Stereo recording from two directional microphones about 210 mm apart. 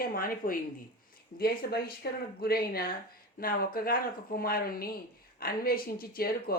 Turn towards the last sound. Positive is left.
turn(degrees=45)  # may be behind; listen again after turning